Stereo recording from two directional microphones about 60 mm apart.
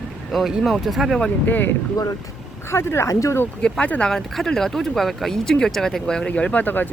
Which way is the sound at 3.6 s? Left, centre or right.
Centre.